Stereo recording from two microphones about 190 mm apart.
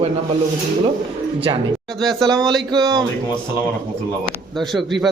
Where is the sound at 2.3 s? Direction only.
Centre (ahead or behind).